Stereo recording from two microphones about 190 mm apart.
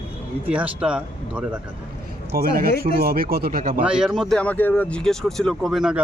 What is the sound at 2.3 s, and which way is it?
Speech, 50° right (ahead or behind).